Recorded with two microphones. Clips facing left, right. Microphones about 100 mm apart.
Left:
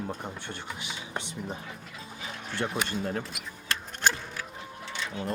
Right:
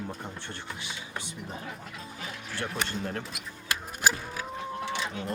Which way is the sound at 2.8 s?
10° left (ahead or behind).